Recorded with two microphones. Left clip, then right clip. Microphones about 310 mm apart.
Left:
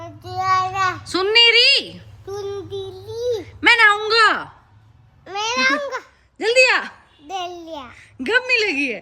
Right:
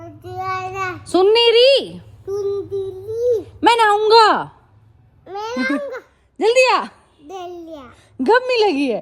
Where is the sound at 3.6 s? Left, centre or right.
Centre.